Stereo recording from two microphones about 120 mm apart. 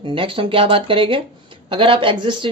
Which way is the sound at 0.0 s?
45° right (ahead or behind).